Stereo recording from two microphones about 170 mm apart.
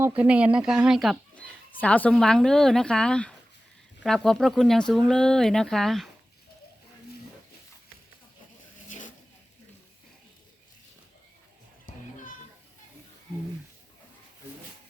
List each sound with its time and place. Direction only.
0.2 s speech: 5° right (ahead or behind)
8.9 s vehicle: 50° left (ahead or behind)
11.9 s children playing: 50° left (ahead or behind)